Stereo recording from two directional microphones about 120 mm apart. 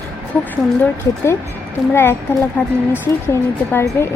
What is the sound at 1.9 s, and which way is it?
Speech, 20° left (ahead or behind).